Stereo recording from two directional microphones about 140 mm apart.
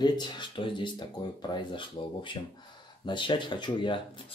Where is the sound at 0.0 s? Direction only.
35° left (ahead or behind).